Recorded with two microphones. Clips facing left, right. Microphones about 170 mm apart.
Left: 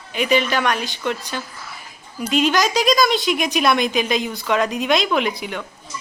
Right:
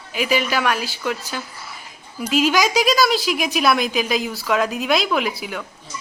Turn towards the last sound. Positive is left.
turn(degrees=-5)  # may be behind; listen again after turning